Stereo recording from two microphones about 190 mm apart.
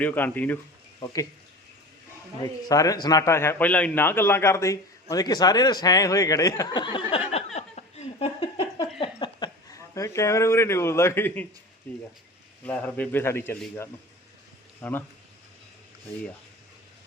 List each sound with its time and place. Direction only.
0.0 s a man's voice: 10° left (ahead or behind)
2.4 s a man's voice: 20° left (ahead or behind)
7.3 s a sound: 35° left (ahead or behind); by 11.4 s 10° left (ahead or behind)
11.9 s a man's voice: 10° left (ahead or behind)